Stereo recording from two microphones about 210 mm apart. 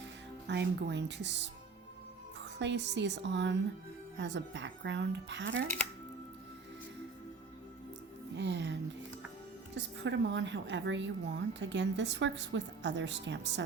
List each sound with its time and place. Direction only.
0.4 s a woman's voice: 55° right (ahead or behind)
2.6 s a woman's voice: 55° right (ahead or behind)
5.6 s speech: 35° right (ahead or behind)
8.4 s a woman's voice: 55° right (ahead or behind)